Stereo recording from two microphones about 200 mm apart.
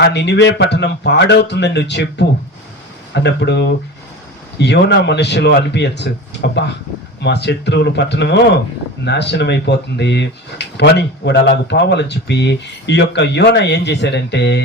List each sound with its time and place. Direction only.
0.0 s speech: 55° left (ahead or behind)